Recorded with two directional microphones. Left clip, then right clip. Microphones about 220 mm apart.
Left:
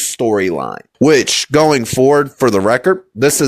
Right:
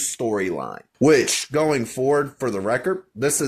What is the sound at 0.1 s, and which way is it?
Speech, 40° left (ahead or behind).